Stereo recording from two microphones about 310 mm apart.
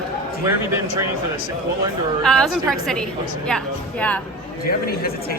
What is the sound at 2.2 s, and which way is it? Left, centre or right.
A woman's voice, centre.